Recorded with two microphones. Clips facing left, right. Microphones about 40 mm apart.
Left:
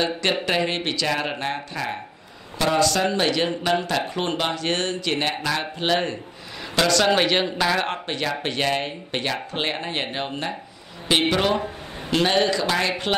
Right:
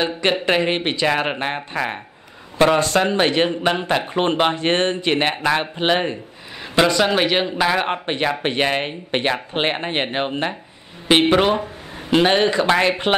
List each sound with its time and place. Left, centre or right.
0.0 s a man's voice: right
7.1 s speech: centre; by 13.1 s right